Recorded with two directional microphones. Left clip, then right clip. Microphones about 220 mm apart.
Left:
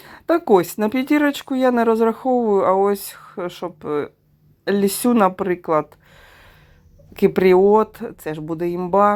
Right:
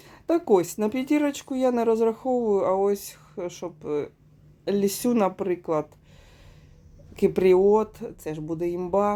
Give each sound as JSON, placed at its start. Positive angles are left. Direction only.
{"t": 0.0, "sound": "speech", "side_deg": 15}
{"t": 7.1, "sound": "speech", "side_deg": 15}